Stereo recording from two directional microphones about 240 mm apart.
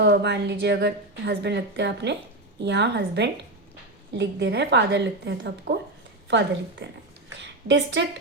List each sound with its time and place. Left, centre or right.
0.0 s a woman's voice: right